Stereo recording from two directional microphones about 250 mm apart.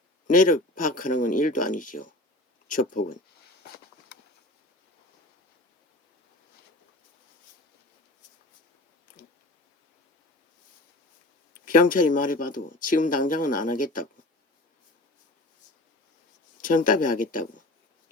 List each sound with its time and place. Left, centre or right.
0.3 s speech: left
11.6 s speech: left
16.6 s speech: left